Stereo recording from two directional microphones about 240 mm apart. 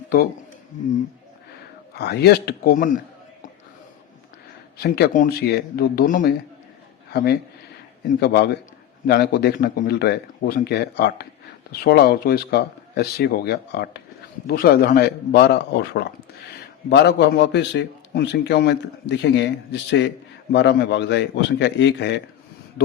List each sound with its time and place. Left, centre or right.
1.9 s speech: left
4.8 s a man's voice: left